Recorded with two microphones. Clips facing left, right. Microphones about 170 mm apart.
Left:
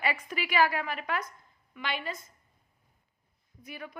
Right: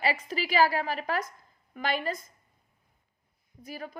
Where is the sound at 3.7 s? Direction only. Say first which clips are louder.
Right 3 dB; 35° right (ahead or behind).